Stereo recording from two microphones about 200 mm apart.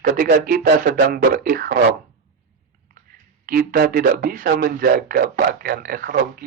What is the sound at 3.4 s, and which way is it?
A man's voice, 50° right (ahead or behind).